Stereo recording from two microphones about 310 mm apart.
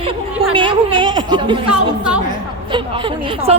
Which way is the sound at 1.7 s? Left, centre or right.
Centre.